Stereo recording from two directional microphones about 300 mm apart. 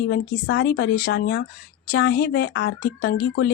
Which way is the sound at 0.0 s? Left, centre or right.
Left.